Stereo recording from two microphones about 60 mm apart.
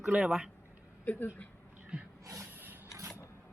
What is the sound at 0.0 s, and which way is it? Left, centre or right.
Speech, centre.